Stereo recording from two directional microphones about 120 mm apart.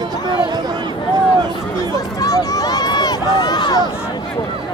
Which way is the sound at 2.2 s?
30° left (ahead or behind).